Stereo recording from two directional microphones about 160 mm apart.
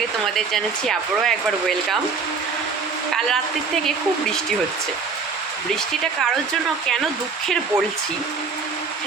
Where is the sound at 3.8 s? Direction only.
5° left (ahead or behind).